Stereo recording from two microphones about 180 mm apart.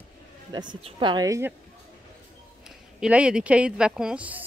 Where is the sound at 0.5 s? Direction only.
25° right (ahead or behind).